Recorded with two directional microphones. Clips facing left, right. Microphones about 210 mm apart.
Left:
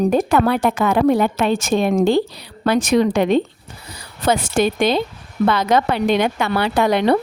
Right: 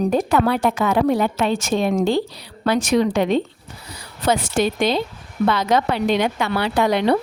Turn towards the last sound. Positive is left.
turn(degrees=55)  # may be behind; listen again after turning